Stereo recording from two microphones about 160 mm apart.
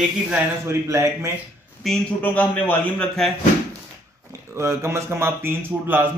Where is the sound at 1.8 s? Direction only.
5° left (ahead or behind).